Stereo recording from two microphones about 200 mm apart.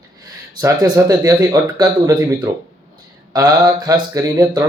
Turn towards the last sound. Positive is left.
turn(degrees=-15)  # may be behind; listen again after turning